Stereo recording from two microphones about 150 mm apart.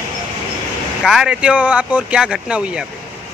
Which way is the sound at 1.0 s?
5° right (ahead or behind).